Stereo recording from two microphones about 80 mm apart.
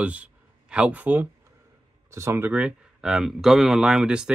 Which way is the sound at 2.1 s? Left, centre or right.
Right.